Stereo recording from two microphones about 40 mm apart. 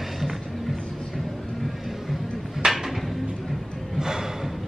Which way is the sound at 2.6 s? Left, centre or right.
Centre.